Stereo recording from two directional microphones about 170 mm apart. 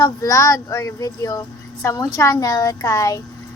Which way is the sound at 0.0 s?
20° left (ahead or behind).